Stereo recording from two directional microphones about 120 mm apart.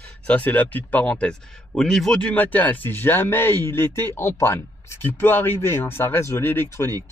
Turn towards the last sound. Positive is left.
turn(degrees=20)  # may be behind; listen again after turning